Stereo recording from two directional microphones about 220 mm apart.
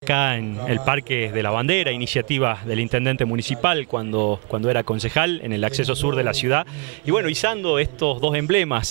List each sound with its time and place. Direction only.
0.1 s speech: 15° right (ahead or behind)
3.9 s speech: 30° right (ahead or behind)
4.6 s speech: 15° right (ahead or behind)
8.0 s a man's voice: 45° right (ahead or behind)
8.3 s speech: 15° right (ahead or behind)